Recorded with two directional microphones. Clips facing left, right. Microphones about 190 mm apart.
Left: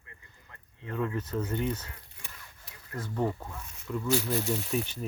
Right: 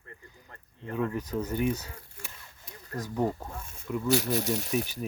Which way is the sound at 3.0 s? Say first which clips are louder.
Right 2 dB; 10° right (ahead or behind).